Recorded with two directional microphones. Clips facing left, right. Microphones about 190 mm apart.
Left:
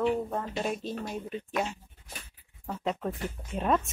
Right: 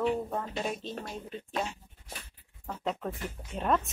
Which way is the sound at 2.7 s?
Centre (ahead or behind).